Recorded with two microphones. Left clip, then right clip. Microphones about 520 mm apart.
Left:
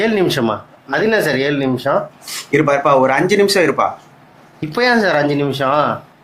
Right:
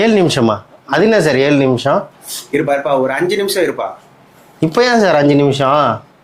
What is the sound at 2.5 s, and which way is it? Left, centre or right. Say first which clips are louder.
Speech: left 2 dB; left.